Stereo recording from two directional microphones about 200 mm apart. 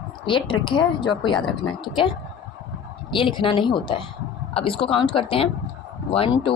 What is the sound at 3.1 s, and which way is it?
Speech, 25° left (ahead or behind).